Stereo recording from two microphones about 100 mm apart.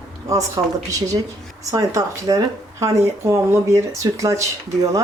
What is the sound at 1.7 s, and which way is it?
Speech, 30° right (ahead or behind).